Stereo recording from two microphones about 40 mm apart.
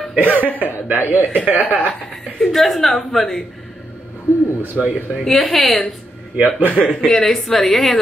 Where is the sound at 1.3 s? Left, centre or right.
Right.